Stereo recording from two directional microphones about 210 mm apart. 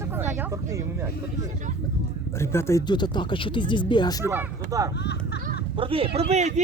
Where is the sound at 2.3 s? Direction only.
10° left (ahead or behind).